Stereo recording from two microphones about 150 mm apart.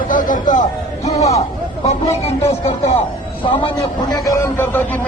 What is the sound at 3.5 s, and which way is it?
Speech, 30° left (ahead or behind).